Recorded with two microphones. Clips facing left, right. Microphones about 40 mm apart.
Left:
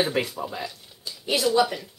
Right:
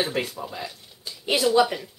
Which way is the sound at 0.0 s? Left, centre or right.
Centre.